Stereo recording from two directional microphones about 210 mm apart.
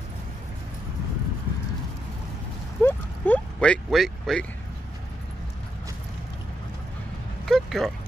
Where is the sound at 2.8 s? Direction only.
5° left (ahead or behind).